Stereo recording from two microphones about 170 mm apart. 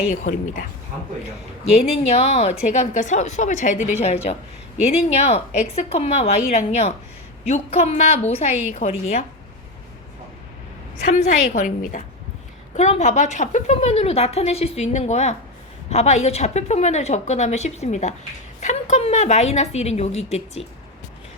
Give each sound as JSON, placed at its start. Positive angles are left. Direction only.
{"t": 0.1, "sound": "a woman's voice", "side_deg": 45}
{"t": 1.7, "sound": "a woman's voice", "side_deg": 40}
{"t": 11.1, "sound": "a woman's voice", "side_deg": 45}